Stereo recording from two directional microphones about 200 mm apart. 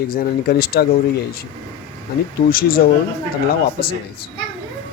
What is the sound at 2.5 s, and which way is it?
Speech, 45° left (ahead or behind).